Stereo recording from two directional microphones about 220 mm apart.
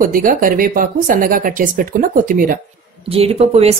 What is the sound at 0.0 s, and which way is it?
Speech, 40° right (ahead or behind).